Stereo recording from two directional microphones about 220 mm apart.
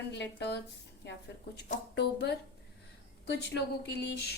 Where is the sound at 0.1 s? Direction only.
50° left (ahead or behind).